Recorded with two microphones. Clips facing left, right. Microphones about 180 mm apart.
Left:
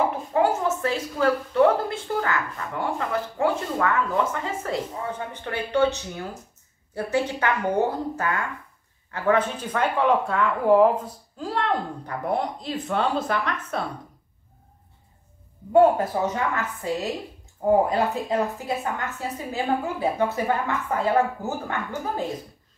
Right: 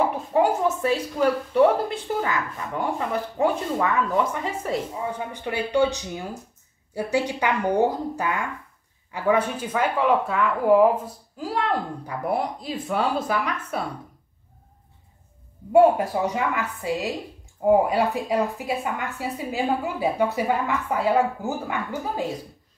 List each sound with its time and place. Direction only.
0.3 s a woman's voice: 15° right (ahead or behind)
15.7 s a woman's voice: 10° right (ahead or behind)